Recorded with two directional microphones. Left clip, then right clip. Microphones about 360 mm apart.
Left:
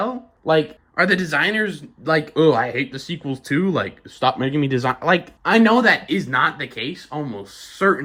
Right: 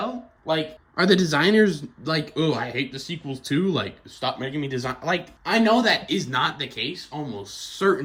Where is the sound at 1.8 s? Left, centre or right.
Centre.